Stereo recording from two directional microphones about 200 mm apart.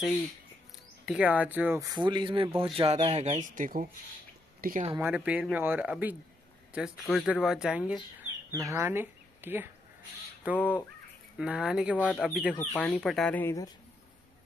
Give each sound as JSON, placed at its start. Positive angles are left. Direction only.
{"t": 1.0, "sound": "speech", "side_deg": -5}
{"t": 2.0, "sound": "speech", "side_deg": -25}
{"t": 4.9, "sound": "speech", "side_deg": -10}
{"t": 12.5, "sound": "speech", "side_deg": 10}